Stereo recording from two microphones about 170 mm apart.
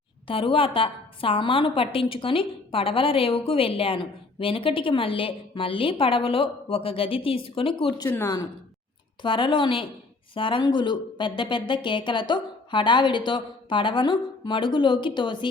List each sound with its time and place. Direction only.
0.3 s a woman's voice: 30° left (ahead or behind)
9.2 s speech: 30° left (ahead or behind)